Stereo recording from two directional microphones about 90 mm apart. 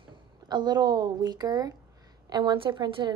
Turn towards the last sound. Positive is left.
turn(degrees=-60)  # may be behind; listen again after turning